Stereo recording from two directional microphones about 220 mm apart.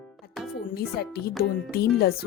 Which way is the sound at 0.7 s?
45° left (ahead or behind).